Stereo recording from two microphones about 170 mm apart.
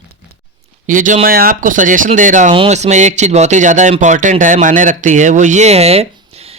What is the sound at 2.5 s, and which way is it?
Speech, 35° right (ahead or behind).